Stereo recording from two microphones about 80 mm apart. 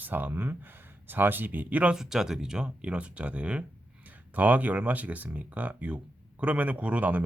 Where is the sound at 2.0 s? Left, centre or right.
Centre.